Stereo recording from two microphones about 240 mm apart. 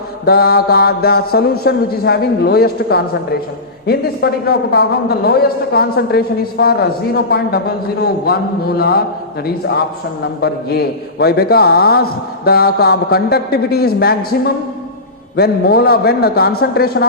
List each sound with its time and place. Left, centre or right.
0.3 s a man's voice: left
15.4 s a man's voice: left